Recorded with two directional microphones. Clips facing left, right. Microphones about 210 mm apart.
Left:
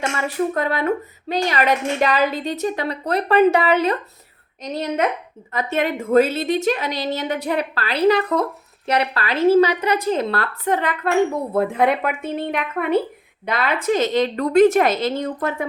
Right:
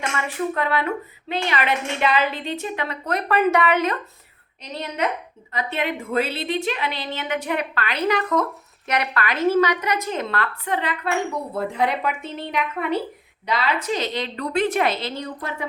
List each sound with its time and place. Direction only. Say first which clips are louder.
0.0 s a woman's voice: left 4 dB; 40° left (ahead or behind)
4.6 s a woman's voice: left 5 dB; 45° left (ahead or behind)